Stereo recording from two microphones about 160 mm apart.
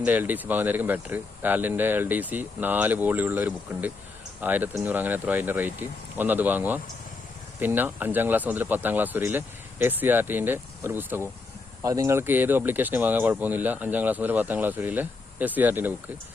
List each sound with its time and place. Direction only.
0.0 s speech: 10° right (ahead or behind)